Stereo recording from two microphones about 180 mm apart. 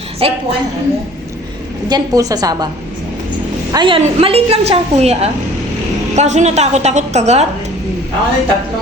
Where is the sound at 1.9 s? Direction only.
20° right (ahead or behind).